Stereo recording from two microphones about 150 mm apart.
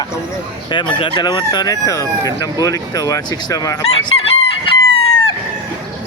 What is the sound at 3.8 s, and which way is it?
Chicken, 40° left (ahead or behind).